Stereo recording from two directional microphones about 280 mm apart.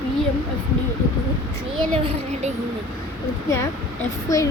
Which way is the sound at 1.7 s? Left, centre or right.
Centre.